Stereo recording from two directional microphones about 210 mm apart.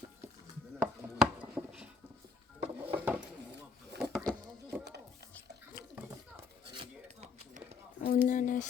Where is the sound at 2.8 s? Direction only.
10° right (ahead or behind).